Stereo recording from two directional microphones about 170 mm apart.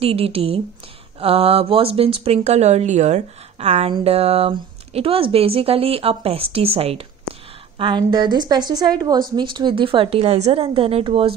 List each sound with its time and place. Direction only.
0.0 s a woman's voice: 35° right (ahead or behind)